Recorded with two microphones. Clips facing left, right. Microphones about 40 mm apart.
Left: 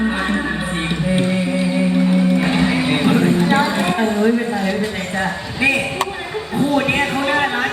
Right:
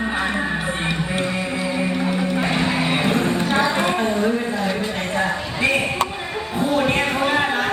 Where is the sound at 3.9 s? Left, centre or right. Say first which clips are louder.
Left 3 dB; left.